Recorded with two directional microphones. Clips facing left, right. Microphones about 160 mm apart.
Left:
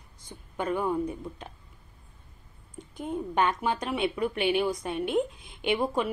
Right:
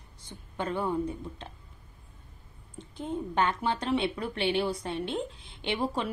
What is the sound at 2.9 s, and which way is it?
A woman's voice, 10° left (ahead or behind).